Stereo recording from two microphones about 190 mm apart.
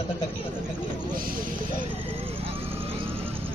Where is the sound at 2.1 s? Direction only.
30° right (ahead or behind).